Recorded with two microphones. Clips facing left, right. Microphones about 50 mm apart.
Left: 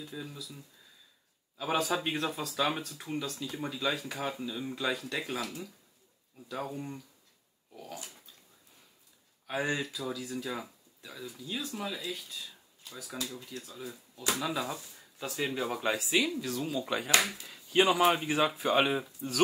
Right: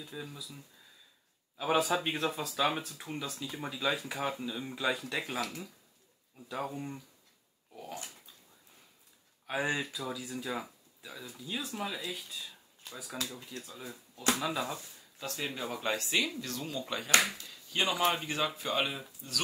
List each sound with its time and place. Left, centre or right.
0.0 s speech: centre
1.6 s speech: centre
9.5 s speech: centre
13.4 s speech: right
13.7 s speech: centre
19.2 s speech: left